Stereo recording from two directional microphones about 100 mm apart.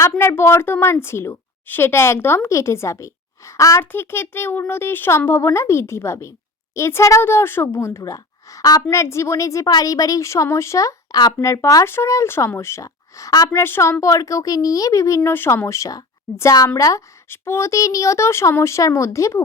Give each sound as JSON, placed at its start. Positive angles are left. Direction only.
{"t": 0.0, "sound": "a woman's voice", "side_deg": 25}
{"t": 13.6, "sound": "a woman's voice", "side_deg": 25}